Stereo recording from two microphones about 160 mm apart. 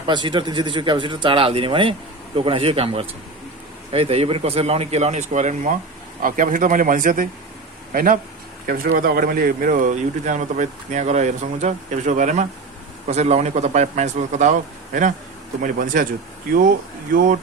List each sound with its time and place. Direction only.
0.1 s speech: 30° right (ahead or behind); by 14.5 s 45° right (ahead or behind)
15.6 s speech: 60° right (ahead or behind)